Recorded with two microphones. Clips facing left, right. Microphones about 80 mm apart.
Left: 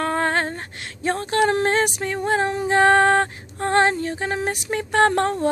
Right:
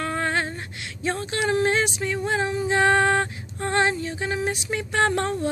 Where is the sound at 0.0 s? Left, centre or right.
Left.